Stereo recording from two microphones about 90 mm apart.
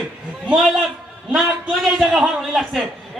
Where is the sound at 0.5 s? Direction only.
Centre (ahead or behind).